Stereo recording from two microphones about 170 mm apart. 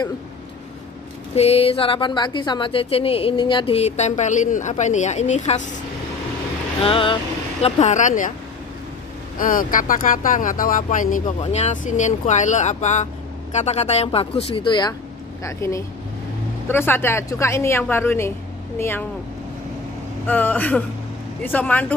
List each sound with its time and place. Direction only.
1.3 s a woman's voice: 35° left (ahead or behind)
6.8 s a woman's voice: 30° left (ahead or behind)
7.6 s speech: 45° left (ahead or behind)
9.4 s a woman's voice: 55° left (ahead or behind); by 19.0 s 10° left (ahead or behind)
20.2 s a woman's voice: 10° left (ahead or behind)